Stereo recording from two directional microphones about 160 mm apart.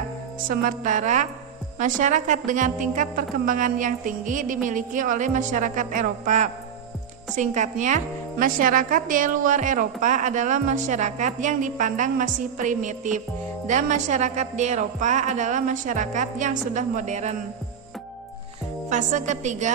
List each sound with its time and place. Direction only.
0.5 s a woman's voice: 60° right (ahead or behind)
18.9 s a woman's voice: 50° right (ahead or behind)